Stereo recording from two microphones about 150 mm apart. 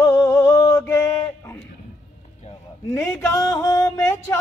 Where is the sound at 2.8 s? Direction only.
20° left (ahead or behind).